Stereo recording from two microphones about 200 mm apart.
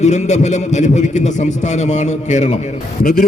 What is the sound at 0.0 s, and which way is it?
A man's voice, 35° left (ahead or behind).